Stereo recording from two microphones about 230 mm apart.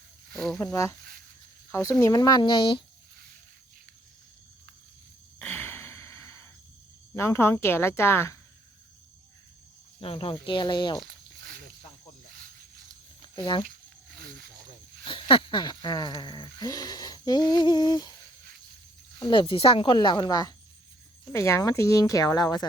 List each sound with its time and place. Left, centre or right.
0.3 s speech: centre
0.7 s speech: centre
5.4 s sigh: centre
7.2 s speech: centre
10.0 s speech: left
11.1 s a sound: right
13.2 s speech: left
13.7 s a sound: right
15.0 s speech: left
19.2 s speech: left